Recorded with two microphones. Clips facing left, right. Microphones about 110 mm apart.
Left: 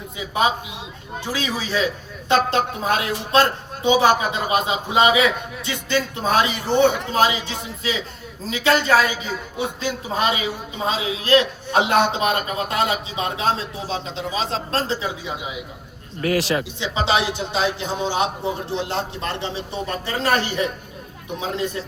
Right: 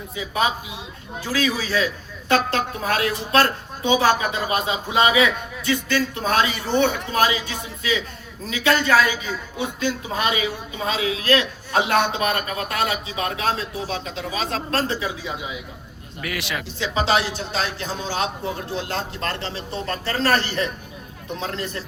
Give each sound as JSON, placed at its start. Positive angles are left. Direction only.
{"t": 1.2, "sound": "a man's voice", "side_deg": 20}
{"t": 16.2, "sound": "speech", "side_deg": 35}
{"t": 16.7, "sound": "a man's voice", "side_deg": 20}